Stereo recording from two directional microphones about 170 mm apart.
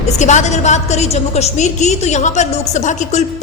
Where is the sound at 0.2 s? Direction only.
45° left (ahead or behind).